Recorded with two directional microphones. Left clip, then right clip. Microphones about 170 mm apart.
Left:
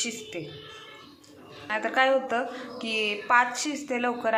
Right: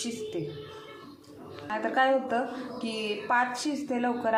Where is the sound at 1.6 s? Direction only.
5° left (ahead or behind).